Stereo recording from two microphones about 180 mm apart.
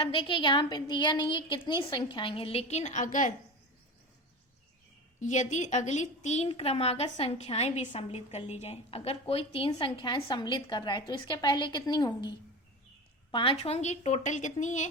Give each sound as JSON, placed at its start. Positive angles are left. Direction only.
{"t": 0.0, "sound": "a woman's voice", "side_deg": 30}
{"t": 5.2, "sound": "a woman's voice", "side_deg": 40}
{"t": 13.3, "sound": "a woman's voice", "side_deg": 30}